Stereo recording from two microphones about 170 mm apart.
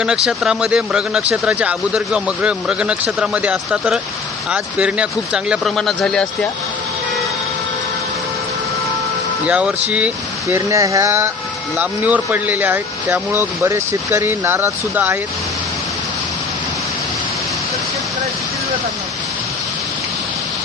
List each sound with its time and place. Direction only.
0.0 s speech: 5° right (ahead or behind)
9.5 s speech: 10° right (ahead or behind)
10.5 s speech: 20° right (ahead or behind)